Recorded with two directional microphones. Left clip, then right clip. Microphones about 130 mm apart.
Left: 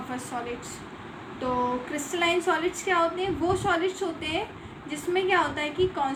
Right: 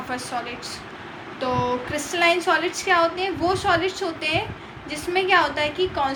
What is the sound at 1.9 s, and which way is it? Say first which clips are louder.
A woman's voice: right 8 dB; 35° left (ahead or behind).